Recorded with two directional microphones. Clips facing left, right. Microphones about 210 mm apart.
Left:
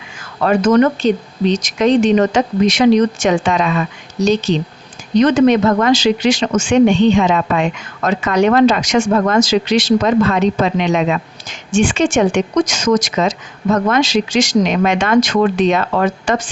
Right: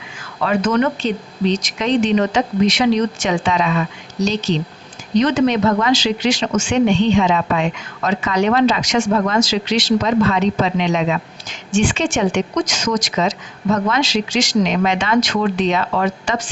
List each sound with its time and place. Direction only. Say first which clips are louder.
0.4 s speech: left 5 dB; 45° left (ahead or behind)
5.2 s speech: left 5 dB; 50° left (ahead or behind)